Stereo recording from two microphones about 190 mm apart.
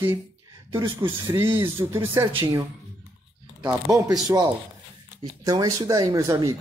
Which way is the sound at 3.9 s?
15° right (ahead or behind).